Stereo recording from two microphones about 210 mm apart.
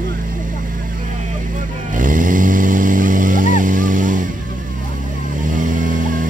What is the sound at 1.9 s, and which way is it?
Vehicle, 40° right (ahead or behind).